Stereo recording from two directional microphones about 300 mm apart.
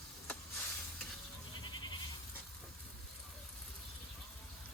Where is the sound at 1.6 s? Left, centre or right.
Centre.